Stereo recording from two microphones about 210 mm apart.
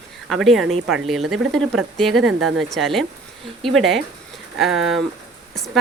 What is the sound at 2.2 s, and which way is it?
Speech, 90° right.